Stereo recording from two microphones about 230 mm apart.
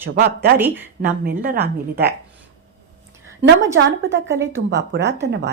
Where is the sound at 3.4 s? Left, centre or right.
Right.